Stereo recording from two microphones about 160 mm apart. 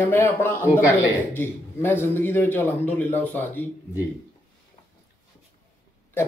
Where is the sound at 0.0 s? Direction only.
15° left (ahead or behind).